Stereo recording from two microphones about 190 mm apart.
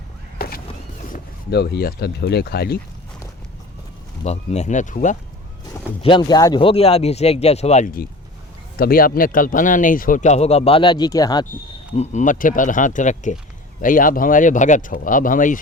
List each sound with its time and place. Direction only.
0.3 s a sound: 50° left (ahead or behind)
1.1 s speech: 60° left (ahead or behind)
4.2 s speech: 35° left (ahead or behind)
6.0 s speech: 25° left (ahead or behind)
11.9 s speech: 40° left (ahead or behind)